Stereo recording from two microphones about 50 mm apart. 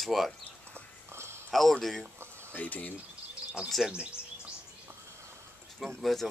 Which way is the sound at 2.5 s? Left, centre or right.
Left.